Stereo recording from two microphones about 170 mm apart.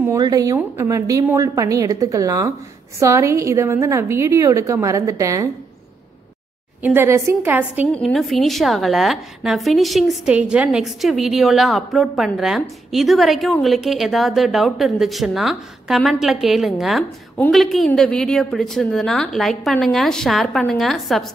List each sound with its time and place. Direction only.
0.0 s a woman's voice: 20° right (ahead or behind)
6.8 s a woman's voice: 10° right (ahead or behind)
7.9 s a woman's voice: centre (ahead or behind)